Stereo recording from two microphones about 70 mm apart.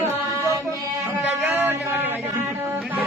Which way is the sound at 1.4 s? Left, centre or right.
Right.